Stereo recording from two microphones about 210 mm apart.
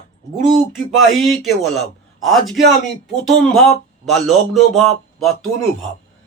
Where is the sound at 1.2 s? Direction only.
Centre (ahead or behind).